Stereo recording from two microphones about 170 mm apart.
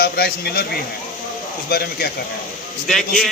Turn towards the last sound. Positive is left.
turn(degrees=0)  # may be behind; listen again after turning